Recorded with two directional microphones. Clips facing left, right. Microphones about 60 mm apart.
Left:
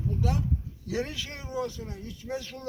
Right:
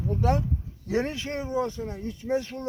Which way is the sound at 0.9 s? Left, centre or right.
Right.